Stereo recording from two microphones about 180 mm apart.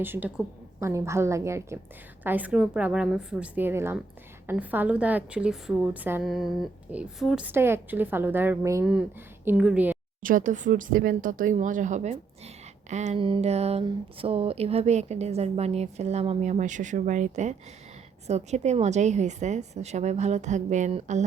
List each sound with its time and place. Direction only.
0.0 s a woman's voice: 10° right (ahead or behind)
10.2 s speech: 45° right (ahead or behind)